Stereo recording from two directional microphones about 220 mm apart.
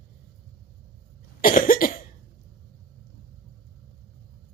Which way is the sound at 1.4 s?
40° left (ahead or behind).